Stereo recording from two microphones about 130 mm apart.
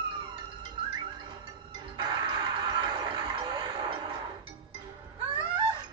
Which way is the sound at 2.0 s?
35° right (ahead or behind).